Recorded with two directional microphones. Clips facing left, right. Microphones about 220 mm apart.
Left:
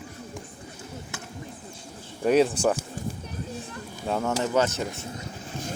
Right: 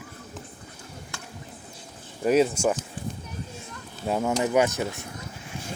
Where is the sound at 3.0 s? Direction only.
45° left (ahead or behind).